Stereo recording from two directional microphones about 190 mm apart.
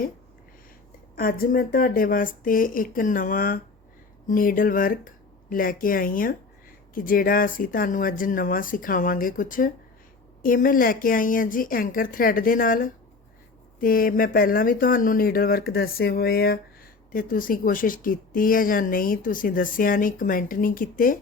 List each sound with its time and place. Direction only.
1.1 s speech: 50° left (ahead or behind)